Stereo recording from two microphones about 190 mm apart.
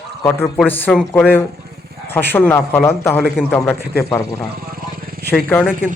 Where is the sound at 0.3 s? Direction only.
10° left (ahead or behind).